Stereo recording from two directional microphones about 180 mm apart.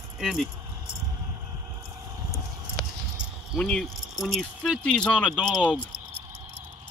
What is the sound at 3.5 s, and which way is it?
Speech, 5° left (ahead or behind).